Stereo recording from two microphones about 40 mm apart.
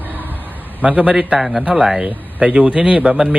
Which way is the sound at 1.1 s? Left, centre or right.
Centre.